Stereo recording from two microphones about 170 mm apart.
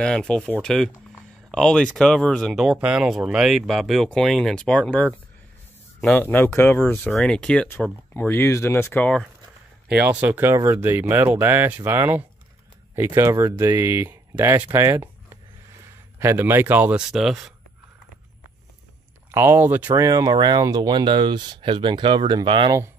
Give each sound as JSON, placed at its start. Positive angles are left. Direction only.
{"t": 0.0, "sound": "speech", "side_deg": 5}
{"t": 9.9, "sound": "speech", "side_deg": -10}
{"t": 16.2, "sound": "speech", "side_deg": -10}
{"t": 19.3, "sound": "speech", "side_deg": -15}